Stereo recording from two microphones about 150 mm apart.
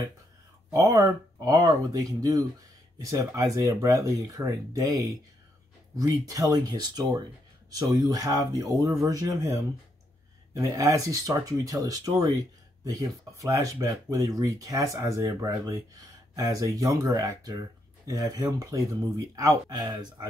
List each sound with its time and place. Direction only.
0.7 s speech: 20° right (ahead or behind)